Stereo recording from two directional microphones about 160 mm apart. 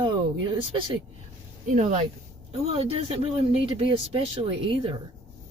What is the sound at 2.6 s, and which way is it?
Speech, 40° right (ahead or behind).